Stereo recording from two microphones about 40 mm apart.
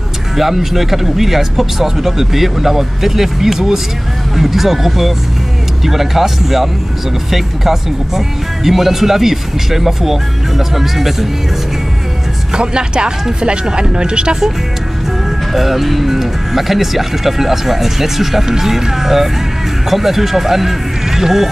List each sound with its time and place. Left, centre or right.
0.4 s speech: centre
12.5 s speech: right
15.5 s speech: centre